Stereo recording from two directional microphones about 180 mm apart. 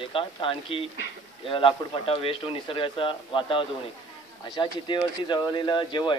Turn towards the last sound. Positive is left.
turn(degrees=25)  # may be behind; listen again after turning